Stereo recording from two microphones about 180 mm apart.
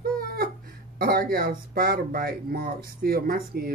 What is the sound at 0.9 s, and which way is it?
Speech, 55° right (ahead or behind).